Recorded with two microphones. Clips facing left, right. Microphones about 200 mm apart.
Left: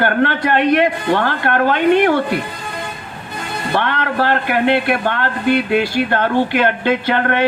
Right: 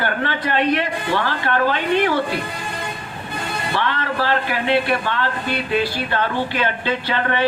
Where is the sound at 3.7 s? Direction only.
55° left (ahead or behind).